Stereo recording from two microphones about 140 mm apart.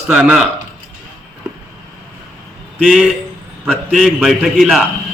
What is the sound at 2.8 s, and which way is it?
A man's voice, 5° left (ahead or behind).